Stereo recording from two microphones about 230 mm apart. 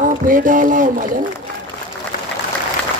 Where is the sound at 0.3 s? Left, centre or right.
Right.